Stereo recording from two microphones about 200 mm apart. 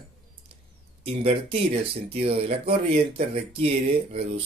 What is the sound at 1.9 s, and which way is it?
Speech, 30° right (ahead or behind).